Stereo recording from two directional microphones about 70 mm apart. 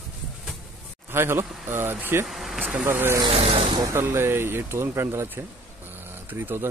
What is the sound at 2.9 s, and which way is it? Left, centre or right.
Speech, right.